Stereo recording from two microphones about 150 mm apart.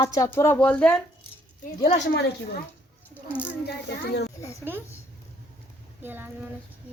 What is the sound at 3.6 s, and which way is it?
Speech, 90° left.